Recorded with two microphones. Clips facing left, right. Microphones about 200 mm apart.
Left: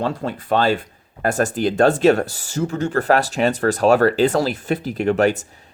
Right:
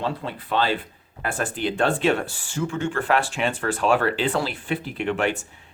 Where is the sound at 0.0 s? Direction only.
45° left (ahead or behind).